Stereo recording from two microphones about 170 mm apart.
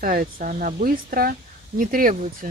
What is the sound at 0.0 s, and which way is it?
Speech, 55° right (ahead or behind).